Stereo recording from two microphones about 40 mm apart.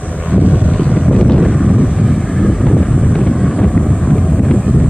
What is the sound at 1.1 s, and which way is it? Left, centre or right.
Vehicle, centre.